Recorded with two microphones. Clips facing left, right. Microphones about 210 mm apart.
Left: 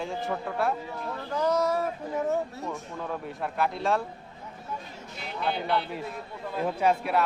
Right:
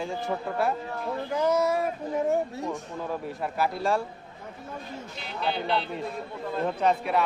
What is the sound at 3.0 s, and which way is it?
Speech, 5° right (ahead or behind).